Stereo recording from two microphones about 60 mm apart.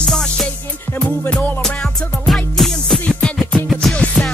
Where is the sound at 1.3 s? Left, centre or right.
Left.